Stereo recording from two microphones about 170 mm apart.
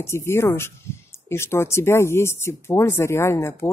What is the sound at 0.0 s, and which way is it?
Speech, 15° left (ahead or behind).